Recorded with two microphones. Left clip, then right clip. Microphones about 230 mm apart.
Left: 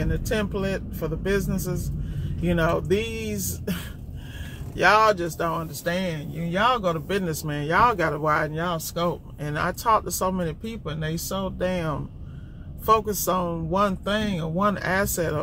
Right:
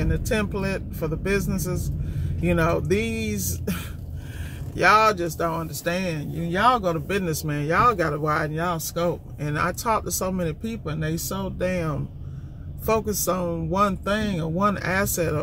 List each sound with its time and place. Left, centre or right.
0.1 s speech: centre
4.7 s speech: centre
13.2 s speech: centre